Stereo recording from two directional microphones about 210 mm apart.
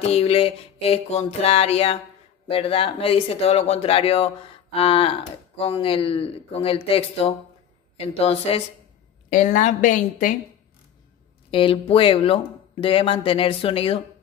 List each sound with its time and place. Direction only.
0.0 s music: 30° left (ahead or behind)
9.3 s speech: 40° left (ahead or behind)
11.5 s music: 25° left (ahead or behind)